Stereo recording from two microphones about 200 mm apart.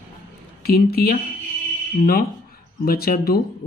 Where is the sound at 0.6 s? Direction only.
50° left (ahead or behind).